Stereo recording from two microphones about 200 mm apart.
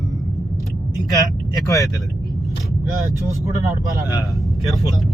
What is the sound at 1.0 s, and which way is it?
Speech, 20° left (ahead or behind).